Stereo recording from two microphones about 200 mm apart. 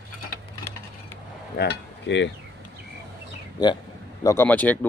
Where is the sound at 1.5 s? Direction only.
55° left (ahead or behind).